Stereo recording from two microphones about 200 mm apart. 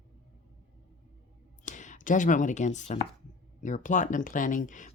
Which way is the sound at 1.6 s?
40° left (ahead or behind).